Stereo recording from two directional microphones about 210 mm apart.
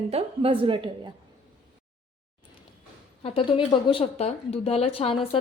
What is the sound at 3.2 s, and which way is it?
A woman's voice, 25° left (ahead or behind).